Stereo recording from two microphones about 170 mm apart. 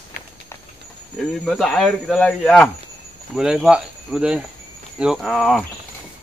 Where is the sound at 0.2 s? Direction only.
50° left (ahead or behind).